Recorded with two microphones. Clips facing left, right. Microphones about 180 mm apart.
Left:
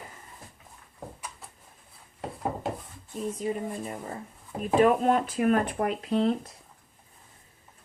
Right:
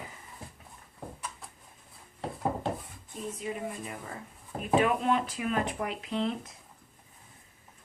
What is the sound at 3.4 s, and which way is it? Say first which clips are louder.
Speech: left 4 dB; 35° left (ahead or behind).